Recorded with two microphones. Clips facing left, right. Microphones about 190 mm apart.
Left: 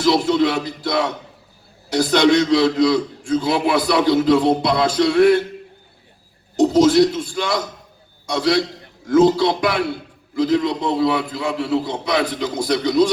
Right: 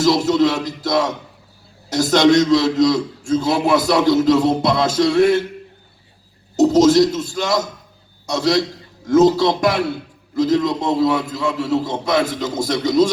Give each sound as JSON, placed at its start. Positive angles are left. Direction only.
{"t": 0.0, "sound": "a man's voice", "side_deg": -45}
{"t": 6.6, "sound": "a man's voice", "side_deg": -45}